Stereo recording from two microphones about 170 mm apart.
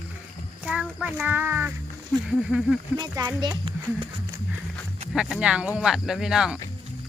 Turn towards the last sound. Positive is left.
turn(degrees=-5)  # may be behind; listen again after turning